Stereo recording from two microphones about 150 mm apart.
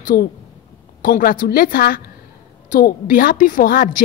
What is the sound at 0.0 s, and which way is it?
A woman's voice, 75° left (ahead or behind).